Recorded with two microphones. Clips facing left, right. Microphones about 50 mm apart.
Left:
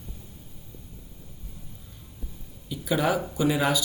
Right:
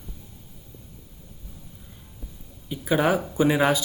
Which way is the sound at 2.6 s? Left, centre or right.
Right.